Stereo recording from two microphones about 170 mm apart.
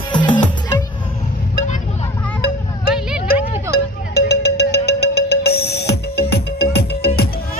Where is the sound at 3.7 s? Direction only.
70° left (ahead or behind).